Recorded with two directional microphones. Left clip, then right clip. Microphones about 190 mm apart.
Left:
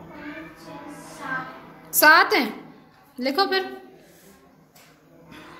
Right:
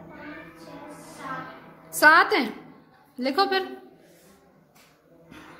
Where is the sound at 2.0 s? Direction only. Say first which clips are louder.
Left 2 dB; 10° right (ahead or behind).